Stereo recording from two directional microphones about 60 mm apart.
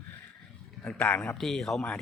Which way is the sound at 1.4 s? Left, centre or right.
Centre.